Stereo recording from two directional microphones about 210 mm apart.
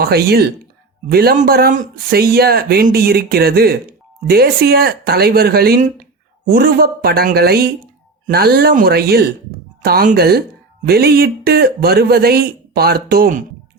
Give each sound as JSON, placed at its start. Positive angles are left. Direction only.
{"t": 0.0, "sound": "speech", "side_deg": -50}